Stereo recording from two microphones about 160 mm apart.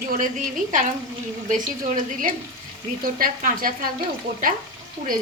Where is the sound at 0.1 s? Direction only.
55° right (ahead or behind).